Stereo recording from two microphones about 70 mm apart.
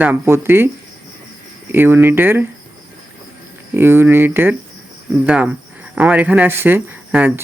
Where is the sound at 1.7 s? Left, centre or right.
Right.